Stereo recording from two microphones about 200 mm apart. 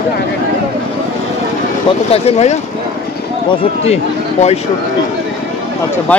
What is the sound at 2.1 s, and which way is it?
Speech, 30° left (ahead or behind).